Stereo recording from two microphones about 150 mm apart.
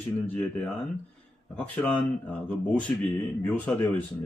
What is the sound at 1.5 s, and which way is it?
Speech, 10° left (ahead or behind).